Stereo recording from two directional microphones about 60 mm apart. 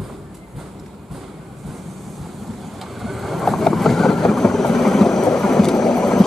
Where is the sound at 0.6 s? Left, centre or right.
Centre.